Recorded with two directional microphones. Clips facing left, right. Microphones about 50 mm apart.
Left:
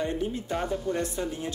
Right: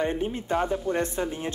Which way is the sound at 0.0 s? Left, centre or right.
Right.